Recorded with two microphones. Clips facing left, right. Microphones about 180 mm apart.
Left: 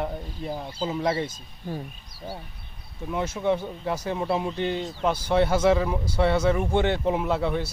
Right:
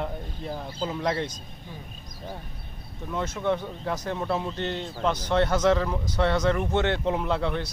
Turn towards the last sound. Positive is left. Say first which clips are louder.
# left 2 dB
turn(degrees=5)  # may be behind; listen again after turning